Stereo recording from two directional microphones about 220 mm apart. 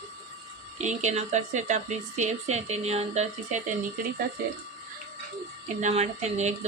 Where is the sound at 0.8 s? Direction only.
30° right (ahead or behind).